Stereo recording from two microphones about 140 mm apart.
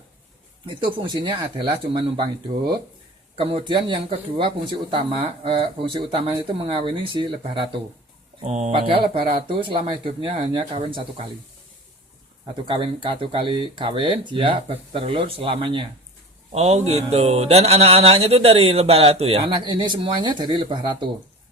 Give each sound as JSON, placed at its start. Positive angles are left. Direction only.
{"t": 0.6, "sound": "speech", "side_deg": -35}
{"t": 3.3, "sound": "speech", "side_deg": -40}
{"t": 8.4, "sound": "speech", "side_deg": -55}
{"t": 8.7, "sound": "speech", "side_deg": -40}
{"t": 12.6, "sound": "speech", "side_deg": -40}
{"t": 16.5, "sound": "speech", "side_deg": -50}